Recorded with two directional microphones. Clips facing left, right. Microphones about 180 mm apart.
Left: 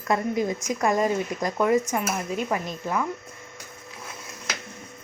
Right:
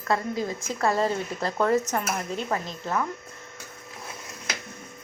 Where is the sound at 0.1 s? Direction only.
20° left (ahead or behind).